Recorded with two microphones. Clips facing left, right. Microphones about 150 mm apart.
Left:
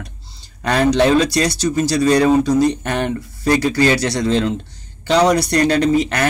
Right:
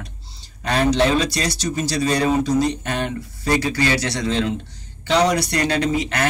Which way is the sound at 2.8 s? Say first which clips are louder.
Left 4 dB; 55° left (ahead or behind).